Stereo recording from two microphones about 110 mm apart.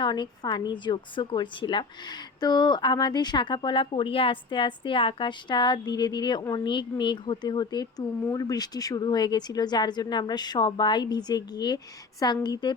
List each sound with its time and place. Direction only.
0.0 s a woman's voice: 45° left (ahead or behind)